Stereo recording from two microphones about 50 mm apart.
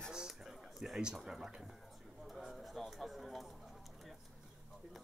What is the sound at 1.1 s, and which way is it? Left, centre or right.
Speech, centre.